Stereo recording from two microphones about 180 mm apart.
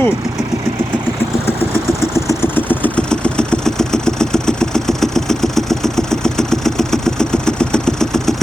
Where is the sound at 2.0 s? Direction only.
15° left (ahead or behind).